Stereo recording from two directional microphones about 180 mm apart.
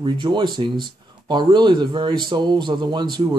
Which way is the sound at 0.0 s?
25° right (ahead or behind).